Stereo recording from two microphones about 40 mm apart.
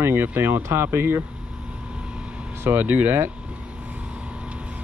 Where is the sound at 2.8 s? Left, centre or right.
Right.